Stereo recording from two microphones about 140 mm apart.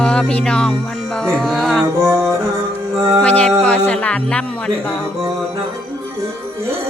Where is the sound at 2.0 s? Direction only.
20° right (ahead or behind).